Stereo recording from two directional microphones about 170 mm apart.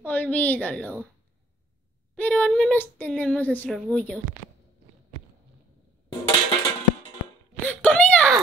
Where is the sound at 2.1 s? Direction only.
5° left (ahead or behind).